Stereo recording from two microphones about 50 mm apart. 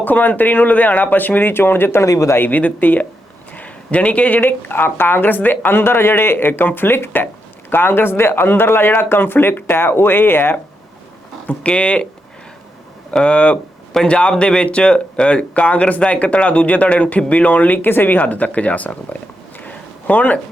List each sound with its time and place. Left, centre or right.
0.0 s speech: left
2.0 s speech: left
2.4 s speech: left
3.5 s a sound: left
4.4 s a woman's voice: left
11.4 s speech: left
13.1 s speech: left
17.8 s a woman's voice: left
18.2 s speech: left
19.5 s a sound: left